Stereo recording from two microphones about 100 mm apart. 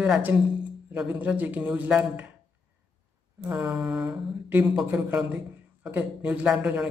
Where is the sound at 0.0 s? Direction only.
15° right (ahead or behind).